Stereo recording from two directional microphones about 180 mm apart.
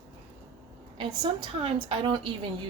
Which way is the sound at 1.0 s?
25° right (ahead or behind).